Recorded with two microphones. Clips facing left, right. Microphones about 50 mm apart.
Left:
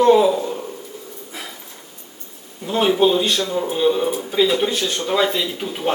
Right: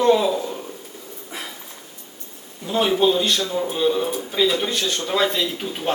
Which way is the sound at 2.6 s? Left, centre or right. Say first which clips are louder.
Left 2 dB; centre.